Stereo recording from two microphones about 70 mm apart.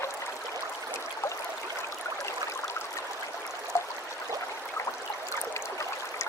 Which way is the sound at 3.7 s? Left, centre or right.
Left.